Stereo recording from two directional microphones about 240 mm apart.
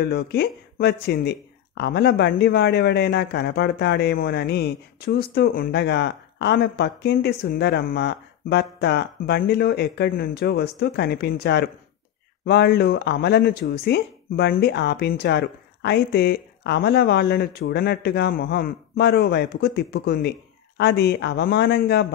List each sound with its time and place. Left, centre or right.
0.0 s speech: left